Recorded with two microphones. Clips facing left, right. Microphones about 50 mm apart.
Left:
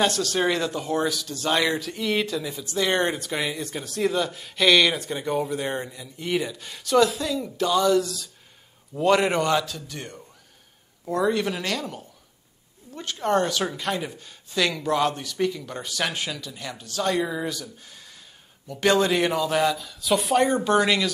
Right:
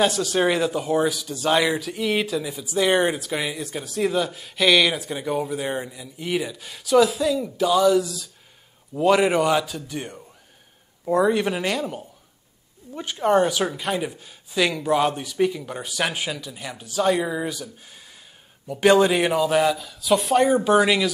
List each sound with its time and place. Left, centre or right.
0.0 s speech: centre